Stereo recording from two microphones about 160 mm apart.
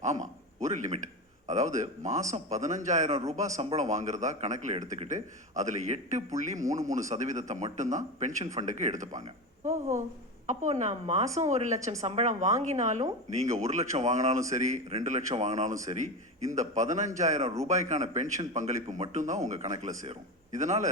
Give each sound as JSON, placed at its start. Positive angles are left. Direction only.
{"t": 0.0, "sound": "a sound", "side_deg": -50}
{"t": 1.5, "sound": "a man's voice", "side_deg": -50}
{"t": 10.4, "sound": "a man's voice", "side_deg": -50}